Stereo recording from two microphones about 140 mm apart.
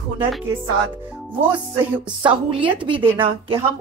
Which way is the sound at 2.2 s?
40° right (ahead or behind).